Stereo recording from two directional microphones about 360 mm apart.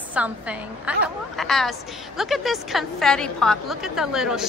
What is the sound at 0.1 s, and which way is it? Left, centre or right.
A woman's voice, centre.